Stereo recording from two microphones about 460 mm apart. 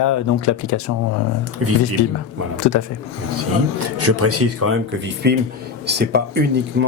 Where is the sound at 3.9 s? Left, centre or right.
Right.